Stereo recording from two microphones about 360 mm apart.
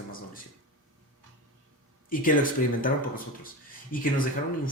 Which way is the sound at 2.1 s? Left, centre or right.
Left.